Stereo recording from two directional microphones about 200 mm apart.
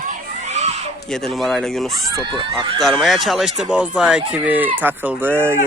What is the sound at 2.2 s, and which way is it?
Speech, 25° right (ahead or behind).